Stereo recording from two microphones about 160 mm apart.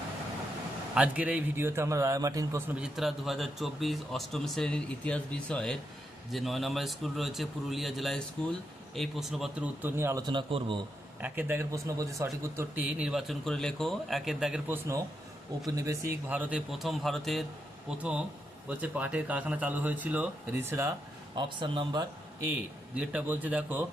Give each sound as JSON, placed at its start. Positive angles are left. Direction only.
{"t": 0.9, "sound": "a man's voice", "side_deg": -10}
{"t": 10.2, "sound": "a man's voice", "side_deg": -30}
{"t": 11.2, "sound": "a man's voice", "side_deg": -15}
{"t": 15.6, "sound": "a man's voice", "side_deg": -20}
{"t": 21.3, "sound": "speech", "side_deg": -30}
{"t": 22.4, "sound": "a man's voice", "side_deg": -5}